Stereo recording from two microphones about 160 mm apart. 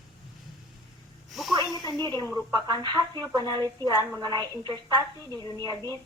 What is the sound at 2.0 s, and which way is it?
A woman's voice, 25° right (ahead or behind).